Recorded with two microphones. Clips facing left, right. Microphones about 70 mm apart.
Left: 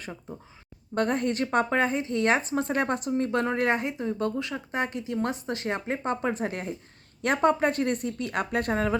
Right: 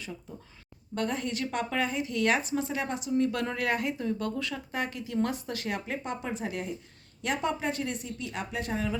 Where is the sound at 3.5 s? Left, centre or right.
Left.